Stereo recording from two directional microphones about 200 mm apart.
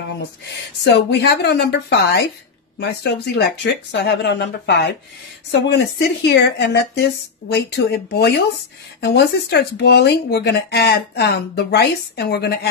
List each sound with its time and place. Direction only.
0.8 s speech: 60° left (ahead or behind)